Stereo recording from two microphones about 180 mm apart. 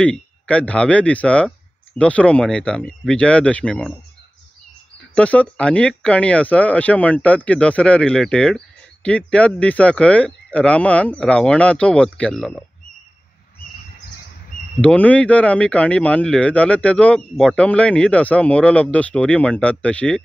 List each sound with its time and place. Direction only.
0.0 s speech: 5° left (ahead or behind)
5.1 s speech: 5° left (ahead or behind)
14.8 s speech: 5° left (ahead or behind)